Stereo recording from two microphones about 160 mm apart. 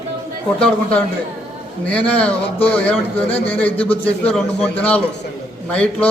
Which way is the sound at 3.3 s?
35° left (ahead or behind).